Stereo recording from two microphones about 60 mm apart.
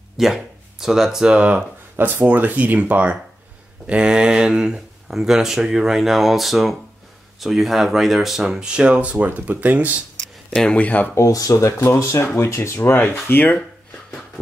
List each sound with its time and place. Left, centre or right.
0.2 s speech: centre
2.0 s speech: right
10.5 s speech: centre
10.8 s speech: left
11.1 s speech: left
12.7 s speech: left